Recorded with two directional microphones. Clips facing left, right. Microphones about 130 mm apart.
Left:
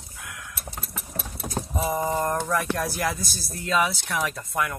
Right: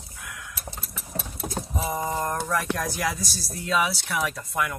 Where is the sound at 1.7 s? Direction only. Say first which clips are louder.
Left 3 dB; centre (ahead or behind).